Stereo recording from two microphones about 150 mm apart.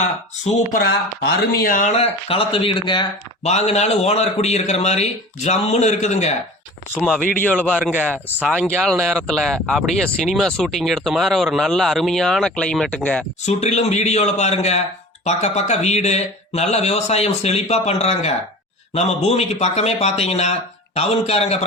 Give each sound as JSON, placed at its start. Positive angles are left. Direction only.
{"t": 0.4, "sound": "speech", "side_deg": 50}
{"t": 0.8, "sound": "speech", "side_deg": 90}
{"t": 1.9, "sound": "speech", "side_deg": 40}
{"t": 3.4, "sound": "speech", "side_deg": 45}
{"t": 7.4, "sound": "a man's voice", "side_deg": 10}
{"t": 7.7, "sound": "speech", "side_deg": -10}
{"t": 9.0, "sound": "speech", "side_deg": 0}
{"t": 13.4, "sound": "speech", "side_deg": 50}